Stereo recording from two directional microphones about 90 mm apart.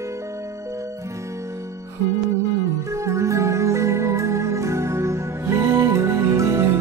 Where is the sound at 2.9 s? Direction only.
35° right (ahead or behind).